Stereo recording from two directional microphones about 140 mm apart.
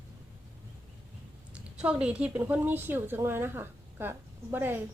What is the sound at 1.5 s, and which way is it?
A woman's voice, 5° right (ahead or behind).